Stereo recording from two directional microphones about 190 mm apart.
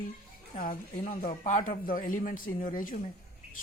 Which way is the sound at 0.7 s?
45° left (ahead or behind).